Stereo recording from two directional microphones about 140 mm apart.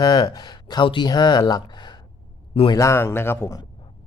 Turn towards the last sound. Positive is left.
turn(degrees=15)  # may be behind; listen again after turning